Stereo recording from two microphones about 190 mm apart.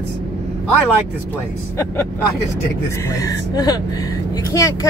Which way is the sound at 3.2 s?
20° left (ahead or behind).